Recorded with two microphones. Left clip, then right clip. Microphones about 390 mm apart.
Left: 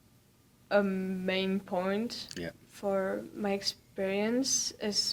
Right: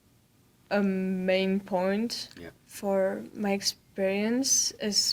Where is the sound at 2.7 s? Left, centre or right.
Right.